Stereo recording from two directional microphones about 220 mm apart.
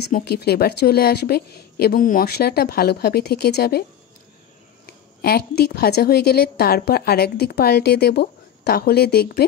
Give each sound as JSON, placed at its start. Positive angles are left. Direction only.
{"t": 0.1, "sound": "a woman's voice", "side_deg": 45}
{"t": 4.8, "sound": "a woman's voice", "side_deg": 45}